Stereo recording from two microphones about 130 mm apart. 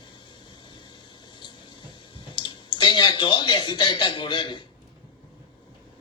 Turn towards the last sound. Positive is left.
turn(degrees=35)  # may be behind; listen again after turning